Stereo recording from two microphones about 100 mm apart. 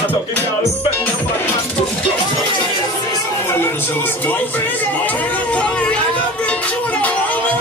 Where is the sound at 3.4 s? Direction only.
20° left (ahead or behind).